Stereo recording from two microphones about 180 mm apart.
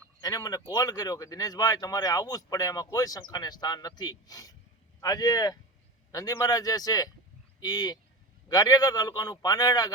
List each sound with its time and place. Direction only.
0.2 s speech: 20° left (ahead or behind)